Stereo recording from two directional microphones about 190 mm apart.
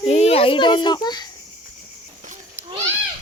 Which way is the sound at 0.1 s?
35° left (ahead or behind).